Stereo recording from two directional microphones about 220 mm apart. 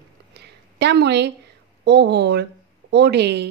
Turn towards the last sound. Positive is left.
turn(degrees=-50)  # may be behind; listen again after turning